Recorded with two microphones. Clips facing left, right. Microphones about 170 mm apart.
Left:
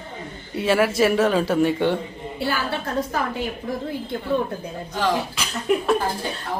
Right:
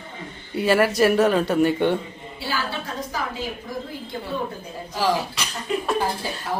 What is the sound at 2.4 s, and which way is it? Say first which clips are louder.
A woman's voice: left 3 dB; 60° left (ahead or behind).